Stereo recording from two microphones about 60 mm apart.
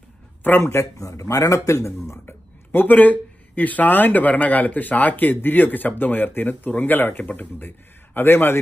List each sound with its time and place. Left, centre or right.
0.4 s speech: left
0.9 s speech: left
2.2 s a man's voice: left